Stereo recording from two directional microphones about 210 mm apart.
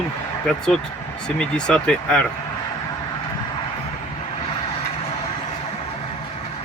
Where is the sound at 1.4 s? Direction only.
5° left (ahead or behind).